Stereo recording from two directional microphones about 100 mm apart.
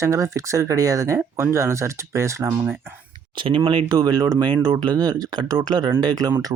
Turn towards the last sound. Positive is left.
turn(degrees=-40)  # may be behind; listen again after turning